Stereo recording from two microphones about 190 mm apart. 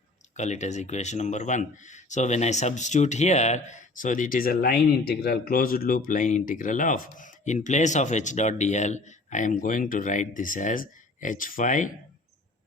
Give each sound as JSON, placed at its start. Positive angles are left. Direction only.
{"t": 0.3, "sound": "speech", "side_deg": 35}